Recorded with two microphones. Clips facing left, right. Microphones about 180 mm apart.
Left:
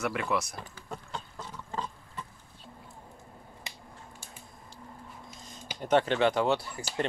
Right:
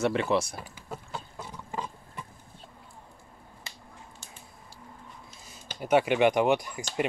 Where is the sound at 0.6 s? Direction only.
5° right (ahead or behind).